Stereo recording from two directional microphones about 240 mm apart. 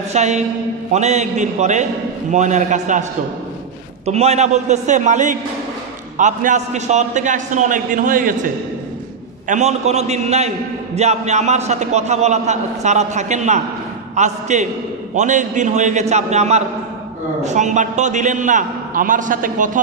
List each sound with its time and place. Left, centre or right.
0.1 s a man's voice: right
9.5 s a man's voice: right